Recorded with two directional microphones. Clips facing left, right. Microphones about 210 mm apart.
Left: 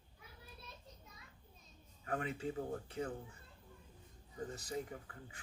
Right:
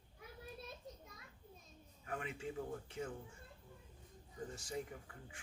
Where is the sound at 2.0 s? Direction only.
35° left (ahead or behind).